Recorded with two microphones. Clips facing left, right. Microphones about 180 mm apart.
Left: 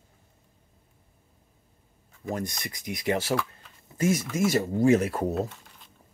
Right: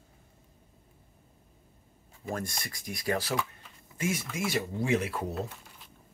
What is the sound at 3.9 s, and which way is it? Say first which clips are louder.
Speech: left 7 dB; 40° left (ahead or behind).